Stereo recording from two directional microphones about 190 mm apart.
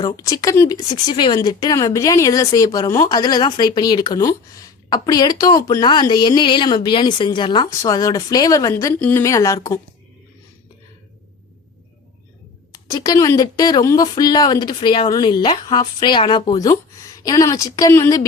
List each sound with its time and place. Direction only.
0.0 s speech: 20° left (ahead or behind)
12.7 s speech: 20° left (ahead or behind)